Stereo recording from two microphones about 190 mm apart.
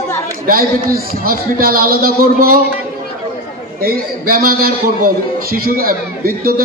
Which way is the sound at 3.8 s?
50° right (ahead or behind).